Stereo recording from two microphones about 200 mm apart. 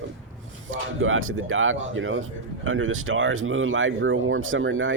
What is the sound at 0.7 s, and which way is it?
Speech, 85° right.